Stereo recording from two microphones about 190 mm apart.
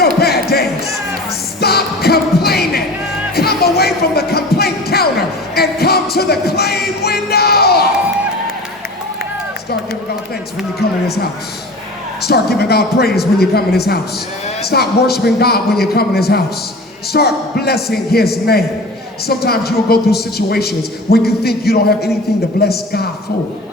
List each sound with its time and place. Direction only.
0.2 s music: 55° left (ahead or behind)
10.8 s a woman's voice: 55° left (ahead or behind)